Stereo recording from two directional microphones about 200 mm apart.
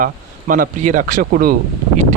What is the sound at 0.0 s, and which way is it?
Speech, 40° right (ahead or behind).